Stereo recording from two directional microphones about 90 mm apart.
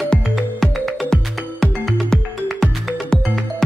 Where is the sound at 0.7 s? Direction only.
Centre (ahead or behind).